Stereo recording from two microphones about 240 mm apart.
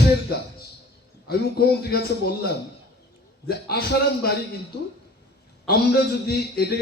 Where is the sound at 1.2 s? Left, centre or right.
Left.